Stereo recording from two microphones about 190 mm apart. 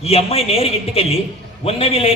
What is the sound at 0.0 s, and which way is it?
A man's voice, 30° left (ahead or behind).